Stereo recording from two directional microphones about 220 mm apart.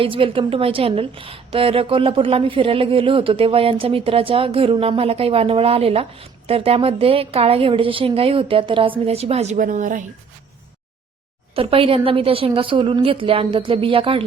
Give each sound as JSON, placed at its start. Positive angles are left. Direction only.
{"t": 0.0, "sound": "a woman's voice", "side_deg": -25}
{"t": 11.5, "sound": "a woman's voice", "side_deg": -25}